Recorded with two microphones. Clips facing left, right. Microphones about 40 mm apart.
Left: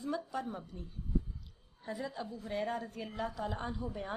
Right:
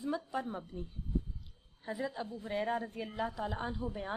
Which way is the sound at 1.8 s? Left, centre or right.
Centre.